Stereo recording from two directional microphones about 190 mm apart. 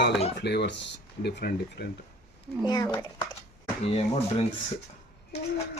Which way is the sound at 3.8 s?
30° left (ahead or behind).